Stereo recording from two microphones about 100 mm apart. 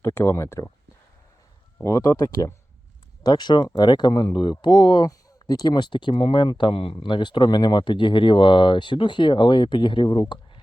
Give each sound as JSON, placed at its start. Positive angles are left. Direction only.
{"t": 0.0, "sound": "speech", "side_deg": 25}
{"t": 1.8, "sound": "speech", "side_deg": 30}
{"t": 3.2, "sound": "speech", "side_deg": 45}
{"t": 6.9, "sound": "speech", "side_deg": 50}